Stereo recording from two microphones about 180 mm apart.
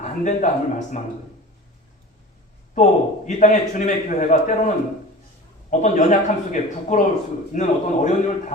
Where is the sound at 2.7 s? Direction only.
40° left (ahead or behind).